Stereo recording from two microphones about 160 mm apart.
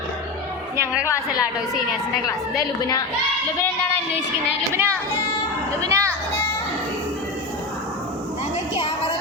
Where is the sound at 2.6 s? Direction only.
20° left (ahead or behind).